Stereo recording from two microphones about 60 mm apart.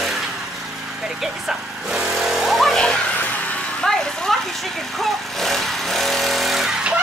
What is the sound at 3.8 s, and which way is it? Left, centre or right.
Vehicle, centre.